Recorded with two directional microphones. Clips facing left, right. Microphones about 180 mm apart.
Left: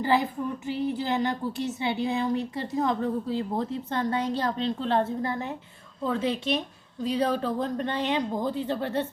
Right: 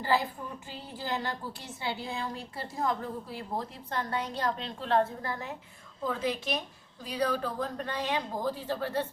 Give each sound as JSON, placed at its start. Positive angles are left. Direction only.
{"t": 0.1, "sound": "a woman's voice", "side_deg": 20}